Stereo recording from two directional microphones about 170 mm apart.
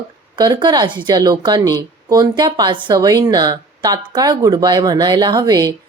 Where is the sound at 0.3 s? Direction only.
25° right (ahead or behind).